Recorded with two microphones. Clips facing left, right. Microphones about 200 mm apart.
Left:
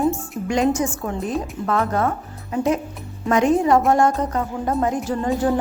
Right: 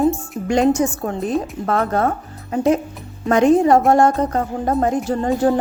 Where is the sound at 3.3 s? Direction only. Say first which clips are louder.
Right 4 dB; 30° right (ahead or behind).